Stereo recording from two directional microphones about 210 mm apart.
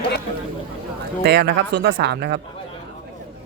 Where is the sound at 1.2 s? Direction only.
50° right (ahead or behind).